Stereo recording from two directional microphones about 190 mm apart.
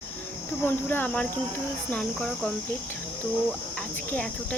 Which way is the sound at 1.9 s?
5° left (ahead or behind).